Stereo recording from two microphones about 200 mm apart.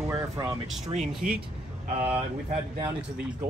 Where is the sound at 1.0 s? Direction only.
Centre (ahead or behind).